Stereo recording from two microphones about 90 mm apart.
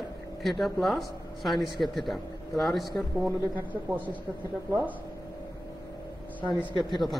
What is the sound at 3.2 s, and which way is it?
Speech, 20° right (ahead or behind).